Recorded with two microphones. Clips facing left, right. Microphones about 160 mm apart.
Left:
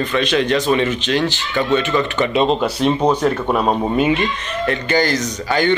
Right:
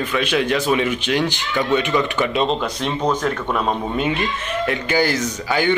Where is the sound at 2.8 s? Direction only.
5° left (ahead or behind).